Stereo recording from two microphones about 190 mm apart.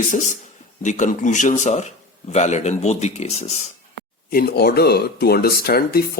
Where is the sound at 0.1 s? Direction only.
40° left (ahead or behind).